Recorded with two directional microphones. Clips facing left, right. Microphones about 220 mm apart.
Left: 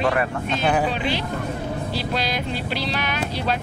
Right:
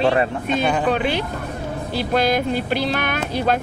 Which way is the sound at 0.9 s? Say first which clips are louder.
Right 4 dB; 55° right (ahead or behind).